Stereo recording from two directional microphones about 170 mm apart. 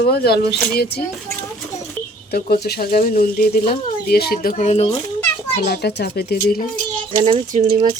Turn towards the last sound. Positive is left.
turn(degrees=-35)  # may be behind; listen again after turning